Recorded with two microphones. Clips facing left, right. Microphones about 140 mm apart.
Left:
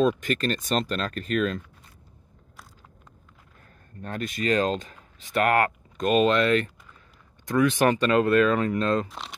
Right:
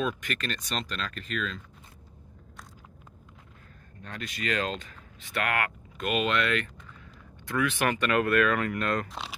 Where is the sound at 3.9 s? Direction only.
45° left (ahead or behind); by 9.0 s 25° left (ahead or behind).